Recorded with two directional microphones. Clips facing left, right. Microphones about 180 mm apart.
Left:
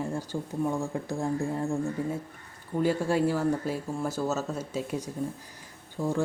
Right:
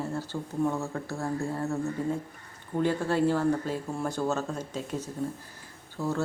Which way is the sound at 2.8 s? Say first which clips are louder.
Even; 10° left (ahead or behind).